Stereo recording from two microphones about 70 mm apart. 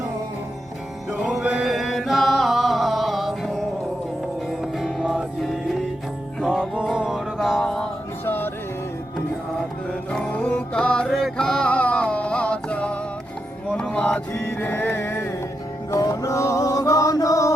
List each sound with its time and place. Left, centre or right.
1.2 s music: centre
1.6 s chant: centre
4.6 s music: centre
6.9 s music: centre
7.3 s mantra: centre
7.6 s music: centre
8.2 s music: left
10.1 s music: centre
14.4 s music: left
15.9 s music: left